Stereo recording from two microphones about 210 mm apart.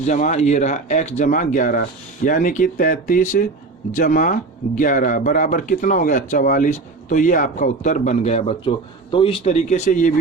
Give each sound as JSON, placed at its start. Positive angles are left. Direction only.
{"t": 0.0, "sound": "speech", "side_deg": 35}